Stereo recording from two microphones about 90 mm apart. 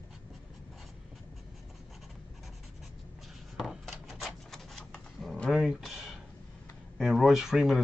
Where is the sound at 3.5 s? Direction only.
5° right (ahead or behind).